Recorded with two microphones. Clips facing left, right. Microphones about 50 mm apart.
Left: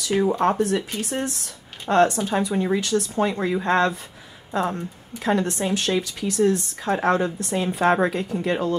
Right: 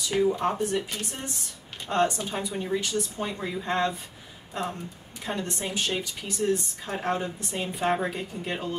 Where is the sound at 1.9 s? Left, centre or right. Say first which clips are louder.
Left 7 dB; left.